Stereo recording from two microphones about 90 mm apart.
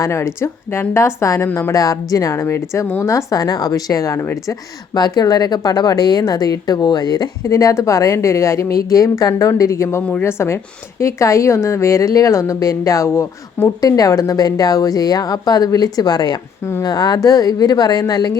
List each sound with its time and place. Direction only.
0.0 s speech: 30° left (ahead or behind)
3.3 s speech: 45° left (ahead or behind)
4.9 s speech: 45° left (ahead or behind)
10.0 s speech: 15° left (ahead or behind)
10.2 s speech: 30° left (ahead or behind); by 18.3 s 45° left (ahead or behind)